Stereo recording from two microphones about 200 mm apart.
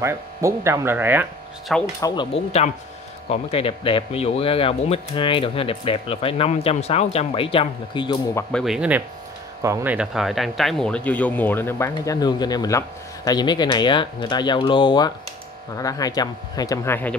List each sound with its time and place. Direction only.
0.0 s speech: 15° right (ahead or behind)
2.0 s speech: 20° left (ahead or behind)
2.3 s speech: 35° left (ahead or behind)
8.5 s speech: centre (ahead or behind)